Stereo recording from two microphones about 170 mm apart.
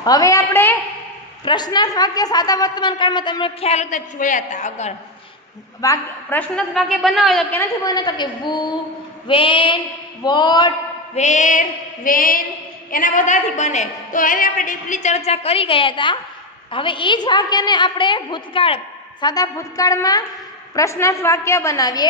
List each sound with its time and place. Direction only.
0.0 s a woman's voice: 20° left (ahead or behind)
1.4 s a woman's voice: 25° left (ahead or behind); by 4.9 s 45° left (ahead or behind)
5.8 s a woman's voice: 20° left (ahead or behind)
6.5 s a woman's voice: centre (ahead or behind)
7.8 s a woman's voice: 20° left (ahead or behind)
11.1 s a woman's voice: 45° left (ahead or behind)
19.2 s a woman's voice: 20° left (ahead or behind)